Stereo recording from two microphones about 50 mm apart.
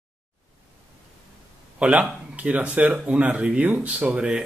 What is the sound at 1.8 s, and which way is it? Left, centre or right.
Speech, right.